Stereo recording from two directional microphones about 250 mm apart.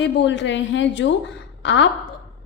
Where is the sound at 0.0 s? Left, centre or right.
Left.